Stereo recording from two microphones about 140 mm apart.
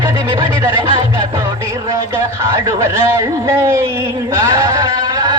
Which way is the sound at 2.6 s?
25° right (ahead or behind).